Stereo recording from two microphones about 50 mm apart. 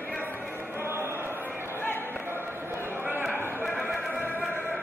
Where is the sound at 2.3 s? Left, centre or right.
Right.